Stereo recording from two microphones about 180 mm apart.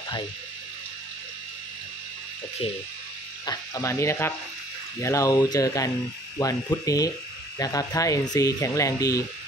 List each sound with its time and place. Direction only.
3.4 s speech: 20° left (ahead or behind)